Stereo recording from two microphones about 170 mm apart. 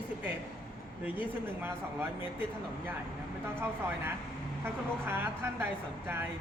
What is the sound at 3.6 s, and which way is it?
A man's voice, 10° right (ahead or behind).